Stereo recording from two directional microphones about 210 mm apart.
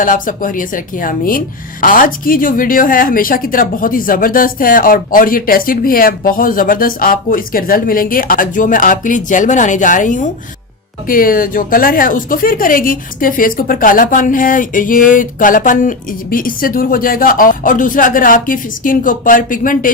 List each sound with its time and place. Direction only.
0.0 s a woman's voice: 40° left (ahead or behind)